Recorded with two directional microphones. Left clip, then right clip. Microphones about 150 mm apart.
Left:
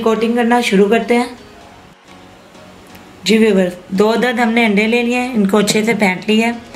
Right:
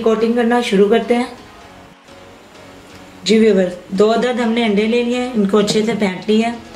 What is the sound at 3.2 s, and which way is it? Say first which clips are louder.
Speech: even; 25° left (ahead or behind).